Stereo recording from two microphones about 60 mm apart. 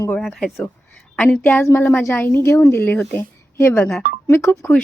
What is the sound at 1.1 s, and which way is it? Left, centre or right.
Speech, centre.